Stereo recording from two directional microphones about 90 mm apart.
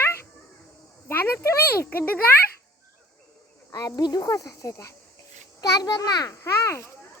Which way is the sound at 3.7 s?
45° left (ahead or behind).